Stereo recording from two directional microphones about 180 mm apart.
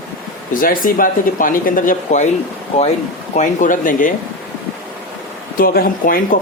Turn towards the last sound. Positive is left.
turn(degrees=50)  # may be behind; listen again after turning